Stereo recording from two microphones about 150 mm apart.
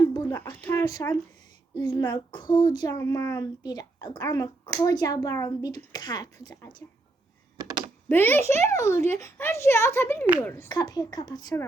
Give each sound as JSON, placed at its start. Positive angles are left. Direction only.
{"t": 0.7, "sound": "a child's voice", "side_deg": 20}
{"t": 7.6, "sound": "typing", "side_deg": -25}
{"t": 8.1, "sound": "speech", "side_deg": 15}
{"t": 10.7, "sound": "a child's voice", "side_deg": 25}